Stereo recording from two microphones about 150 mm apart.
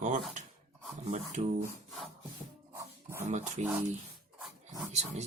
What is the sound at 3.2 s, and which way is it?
Speech, 50° right (ahead or behind).